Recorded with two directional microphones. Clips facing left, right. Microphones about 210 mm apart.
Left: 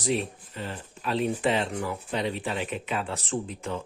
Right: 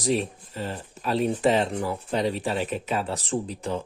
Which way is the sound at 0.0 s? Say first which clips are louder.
Right 3 dB; 40° right (ahead or behind).